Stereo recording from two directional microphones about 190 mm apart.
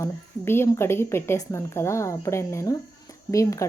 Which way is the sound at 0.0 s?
15° left (ahead or behind).